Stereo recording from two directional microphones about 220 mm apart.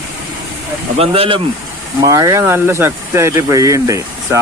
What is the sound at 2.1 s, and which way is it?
Speech, 15° right (ahead or behind).